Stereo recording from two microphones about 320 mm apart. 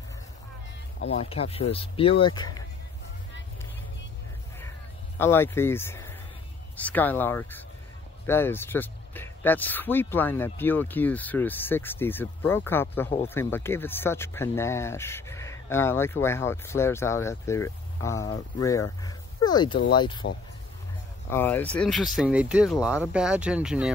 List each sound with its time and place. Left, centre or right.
1.0 s speech: centre
5.2 s speech: centre
21.3 s speech: centre